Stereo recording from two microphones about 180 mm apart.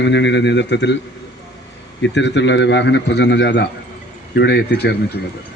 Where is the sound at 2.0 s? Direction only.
80° left; by 5.0 s 65° left (ahead or behind).